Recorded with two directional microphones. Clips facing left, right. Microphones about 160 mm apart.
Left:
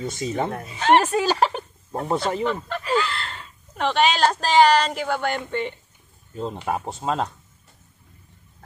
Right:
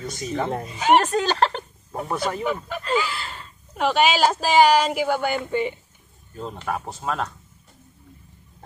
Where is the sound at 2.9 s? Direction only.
10° right (ahead or behind).